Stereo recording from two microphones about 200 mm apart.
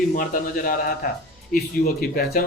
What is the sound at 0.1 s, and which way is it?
Speech, 45° left (ahead or behind).